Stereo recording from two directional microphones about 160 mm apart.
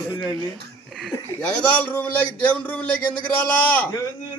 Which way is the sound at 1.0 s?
5° left (ahead or behind).